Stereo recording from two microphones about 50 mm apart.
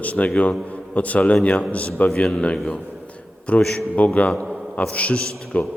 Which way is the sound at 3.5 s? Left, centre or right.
Left.